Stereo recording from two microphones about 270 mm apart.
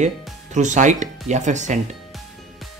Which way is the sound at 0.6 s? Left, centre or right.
Right.